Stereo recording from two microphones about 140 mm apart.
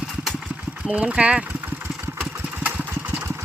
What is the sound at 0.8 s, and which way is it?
Speech, 10° right (ahead or behind).